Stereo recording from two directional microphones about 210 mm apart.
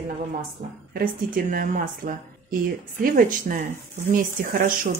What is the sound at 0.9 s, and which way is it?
Speech, 40° right (ahead or behind).